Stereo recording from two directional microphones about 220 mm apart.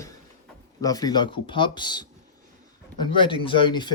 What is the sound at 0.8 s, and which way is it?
Speech, 15° left (ahead or behind).